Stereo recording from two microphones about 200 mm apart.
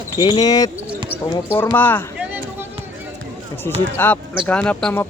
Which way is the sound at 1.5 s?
10° left (ahead or behind).